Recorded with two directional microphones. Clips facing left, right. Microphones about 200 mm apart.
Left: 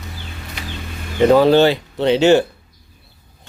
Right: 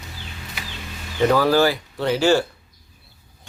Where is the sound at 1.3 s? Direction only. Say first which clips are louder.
Left 6 dB; 25° left (ahead or behind).